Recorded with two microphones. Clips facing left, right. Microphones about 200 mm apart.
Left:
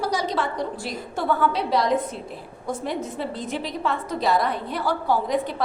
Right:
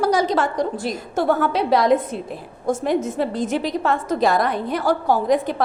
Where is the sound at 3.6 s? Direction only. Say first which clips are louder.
Right 5 dB; 45° right (ahead or behind).